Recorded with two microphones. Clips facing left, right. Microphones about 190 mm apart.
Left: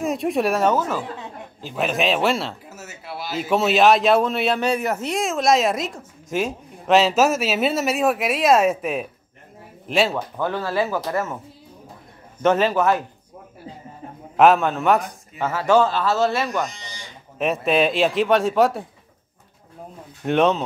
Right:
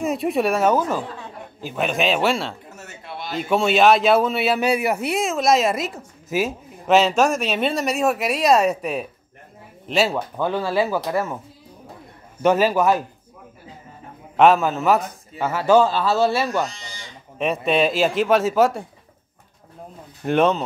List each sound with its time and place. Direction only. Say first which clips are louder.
0.0 s a man's voice: even; centre (ahead or behind)
0.7 s a man's voice: right 2 dB; 15° right (ahead or behind)
1.8 s a man's voice: even; centre (ahead or behind)
12.4 s a man's voice: right 1 dB; 10° right (ahead or behind)
14.3 s a man's voice: even; centre (ahead or behind)
16.6 s speech: right 1 dB; 15° left (ahead or behind)
17.4 s a man's voice: even; centre (ahead or behind)
20.2 s a man's voice: even; centre (ahead or behind)